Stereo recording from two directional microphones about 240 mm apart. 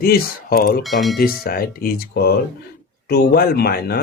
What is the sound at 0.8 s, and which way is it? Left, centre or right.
Speech, centre.